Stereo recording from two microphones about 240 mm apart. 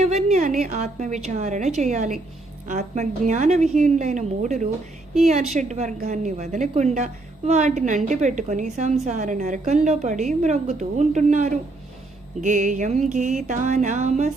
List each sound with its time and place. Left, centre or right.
0.0 s a woman's voice: right